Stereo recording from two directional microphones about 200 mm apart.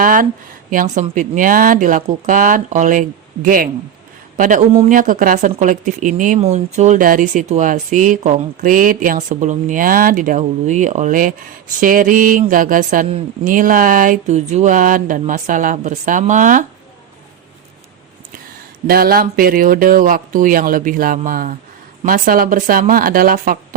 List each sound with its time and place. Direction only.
0.0 s speech: 45° right (ahead or behind)
13.1 s a woman's voice: 30° right (ahead or behind)
13.5 s speech: 45° right (ahead or behind)
18.9 s speech: 50° right (ahead or behind)